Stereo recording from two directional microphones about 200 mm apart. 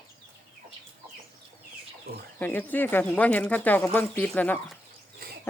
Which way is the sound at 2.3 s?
10° left (ahead or behind).